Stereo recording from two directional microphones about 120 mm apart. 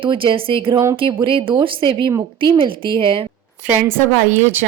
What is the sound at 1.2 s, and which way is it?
A woman's voice, 45° right (ahead or behind).